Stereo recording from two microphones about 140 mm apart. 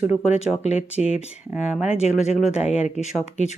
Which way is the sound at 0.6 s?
50° left (ahead or behind).